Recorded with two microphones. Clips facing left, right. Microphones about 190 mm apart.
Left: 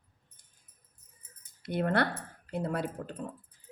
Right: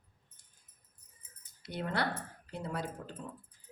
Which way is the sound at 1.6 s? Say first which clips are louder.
Left 6 dB; 55° left (ahead or behind).